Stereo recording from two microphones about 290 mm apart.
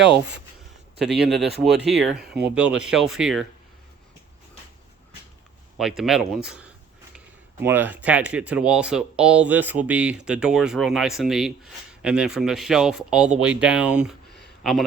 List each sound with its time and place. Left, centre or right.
0.9 s speech: right
1.9 s speech: centre
6.0 s speech: centre